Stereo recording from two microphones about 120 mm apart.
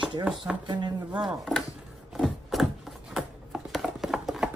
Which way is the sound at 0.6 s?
40° right (ahead or behind).